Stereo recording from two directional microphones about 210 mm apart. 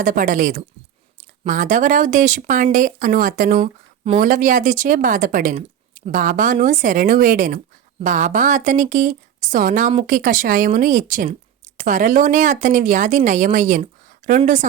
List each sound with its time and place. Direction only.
0.0 s a woman's voice: 40° right (ahead or behind)
3.6 s speech: 30° right (ahead or behind)
4.2 s a woman's voice: 40° right (ahead or behind)